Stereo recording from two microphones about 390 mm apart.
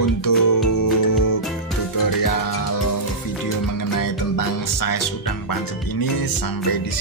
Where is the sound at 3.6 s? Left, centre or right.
Left.